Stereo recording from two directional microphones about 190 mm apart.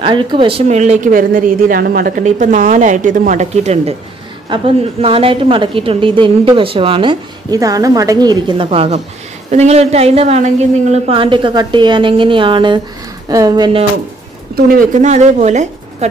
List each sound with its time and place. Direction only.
0.0 s a woman's voice: 25° right (ahead or behind)
14.5 s speech: 45° right (ahead or behind)